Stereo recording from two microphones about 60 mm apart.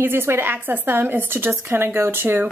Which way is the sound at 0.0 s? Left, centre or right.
Right.